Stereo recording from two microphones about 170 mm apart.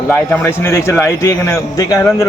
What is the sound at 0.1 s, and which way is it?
A man's voice, 10° left (ahead or behind).